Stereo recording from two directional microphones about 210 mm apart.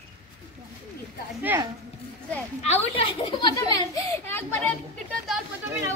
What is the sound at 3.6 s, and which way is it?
A child's voice, 15° left (ahead or behind).